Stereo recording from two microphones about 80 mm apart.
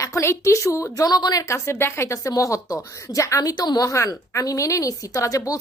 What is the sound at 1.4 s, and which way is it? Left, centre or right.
A woman's voice, left.